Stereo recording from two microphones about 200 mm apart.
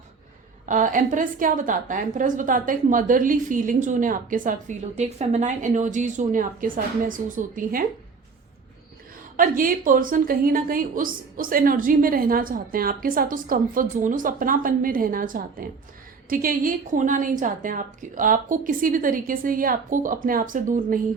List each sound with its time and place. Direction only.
0.6 s a woman's voice: 40° right (ahead or behind)
9.3 s a woman's voice: 45° right (ahead or behind)